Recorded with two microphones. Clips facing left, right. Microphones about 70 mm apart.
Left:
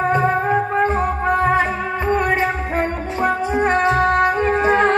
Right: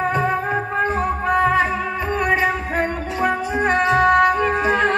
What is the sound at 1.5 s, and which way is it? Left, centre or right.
Music, left.